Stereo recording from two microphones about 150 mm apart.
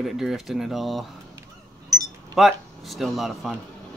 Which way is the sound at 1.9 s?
25° right (ahead or behind).